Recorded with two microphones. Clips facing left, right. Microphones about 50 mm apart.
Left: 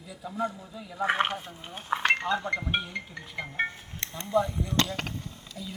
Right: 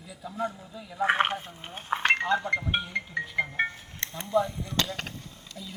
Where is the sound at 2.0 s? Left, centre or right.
Centre.